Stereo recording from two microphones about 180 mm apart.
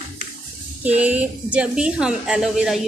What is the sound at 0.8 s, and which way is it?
A woman's voice, 10° right (ahead or behind).